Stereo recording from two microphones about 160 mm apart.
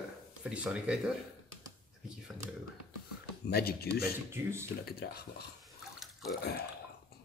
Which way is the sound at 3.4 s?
75° left (ahead or behind).